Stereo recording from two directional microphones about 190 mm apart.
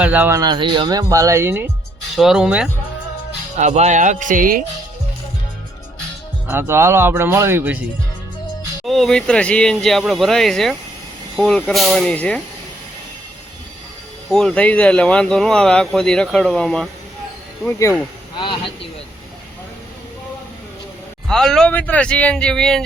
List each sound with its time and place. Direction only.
0.0 s speech: 10° right (ahead or behind)
2.1 s speech: centre (ahead or behind)
3.6 s speech: 40° right (ahead or behind)
6.5 s speech: 10° right (ahead or behind)
8.9 s speech: centre (ahead or behind)
14.3 s speech: centre (ahead or behind)
21.2 s speech: centre (ahead or behind)